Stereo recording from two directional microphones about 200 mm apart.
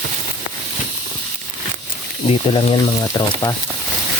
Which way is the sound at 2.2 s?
30° left (ahead or behind).